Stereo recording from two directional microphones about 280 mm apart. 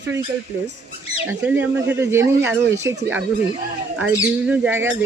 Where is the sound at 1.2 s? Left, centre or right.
Centre.